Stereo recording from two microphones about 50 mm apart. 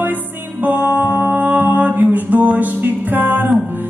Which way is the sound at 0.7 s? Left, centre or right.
Right.